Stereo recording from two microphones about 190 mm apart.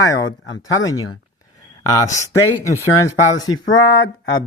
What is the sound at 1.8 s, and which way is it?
Speech, 20° left (ahead or behind).